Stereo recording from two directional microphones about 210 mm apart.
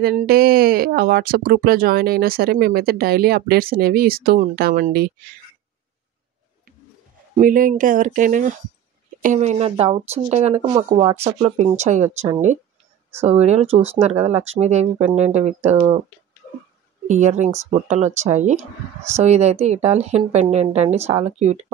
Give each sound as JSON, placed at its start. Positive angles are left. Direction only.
{"t": 0.0, "sound": "speech", "side_deg": -45}
{"t": 7.3, "sound": "speech", "side_deg": -40}
{"t": 17.1, "sound": "speech", "side_deg": -35}